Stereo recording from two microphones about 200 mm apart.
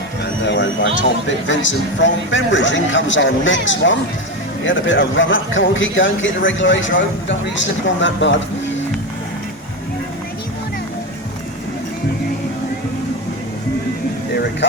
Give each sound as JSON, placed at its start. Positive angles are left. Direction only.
{"t": 0.4, "sound": "a man's voice", "side_deg": 65}
{"t": 14.6, "sound": "speech", "side_deg": 65}